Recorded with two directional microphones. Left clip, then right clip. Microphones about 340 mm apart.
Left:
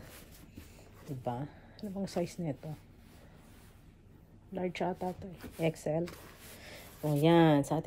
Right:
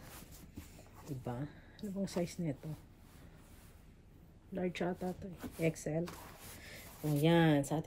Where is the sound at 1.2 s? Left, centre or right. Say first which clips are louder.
Left 8 dB; centre.